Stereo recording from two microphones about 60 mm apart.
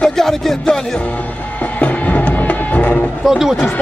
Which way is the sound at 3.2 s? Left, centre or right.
Centre.